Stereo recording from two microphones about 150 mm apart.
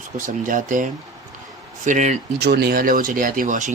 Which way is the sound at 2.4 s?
90° right.